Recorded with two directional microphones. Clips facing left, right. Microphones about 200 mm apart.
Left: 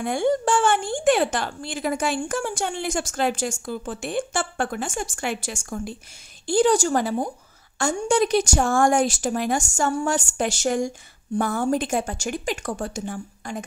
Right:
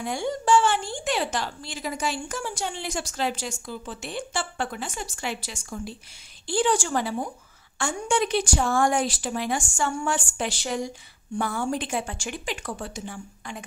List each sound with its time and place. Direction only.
0.0 s a woman's voice: 55° left (ahead or behind)